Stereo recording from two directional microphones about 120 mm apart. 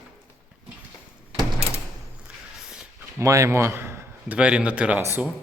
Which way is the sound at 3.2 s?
25° right (ahead or behind).